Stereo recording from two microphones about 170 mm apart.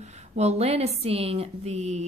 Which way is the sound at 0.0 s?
40° right (ahead or behind).